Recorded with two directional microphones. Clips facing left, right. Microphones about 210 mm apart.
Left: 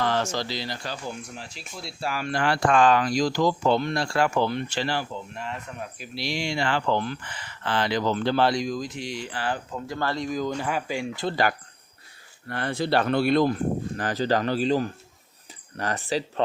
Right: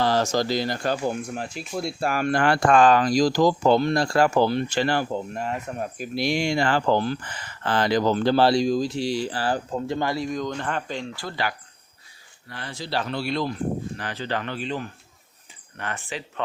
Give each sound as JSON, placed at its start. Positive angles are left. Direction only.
{"t": 0.0, "sound": "speech", "side_deg": -40}
{"t": 4.8, "sound": "speech", "side_deg": -50}
{"t": 10.1, "sound": "speech", "side_deg": 0}
{"t": 12.5, "sound": "speech", "side_deg": 55}